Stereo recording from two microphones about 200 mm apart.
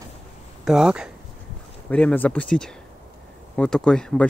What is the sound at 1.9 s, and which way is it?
Speech, 5° left (ahead or behind).